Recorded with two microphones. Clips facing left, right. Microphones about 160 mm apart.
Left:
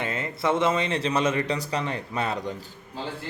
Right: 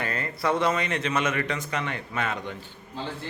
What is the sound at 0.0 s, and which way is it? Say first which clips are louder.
Speech: left 1 dB; 20° left (ahead or behind).